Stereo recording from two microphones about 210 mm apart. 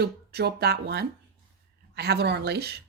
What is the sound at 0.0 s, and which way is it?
Speech, 50° right (ahead or behind).